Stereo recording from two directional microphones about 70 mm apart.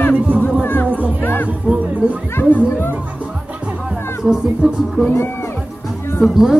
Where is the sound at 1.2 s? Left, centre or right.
Left.